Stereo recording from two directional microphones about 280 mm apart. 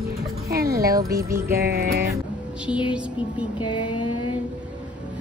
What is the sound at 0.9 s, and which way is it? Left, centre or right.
Speech, centre.